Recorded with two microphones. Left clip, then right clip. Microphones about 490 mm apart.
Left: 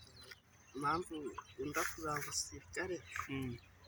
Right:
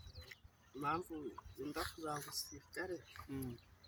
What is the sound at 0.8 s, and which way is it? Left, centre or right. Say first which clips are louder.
Speech: left 3 dB; right.